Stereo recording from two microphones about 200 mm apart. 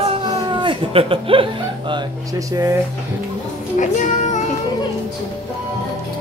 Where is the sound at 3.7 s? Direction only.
40° left (ahead or behind).